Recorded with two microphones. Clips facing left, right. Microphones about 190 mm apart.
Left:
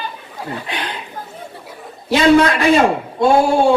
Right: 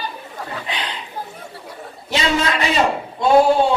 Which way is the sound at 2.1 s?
55° left (ahead or behind).